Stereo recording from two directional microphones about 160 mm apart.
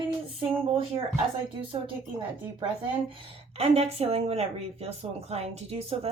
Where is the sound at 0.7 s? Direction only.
40° right (ahead or behind).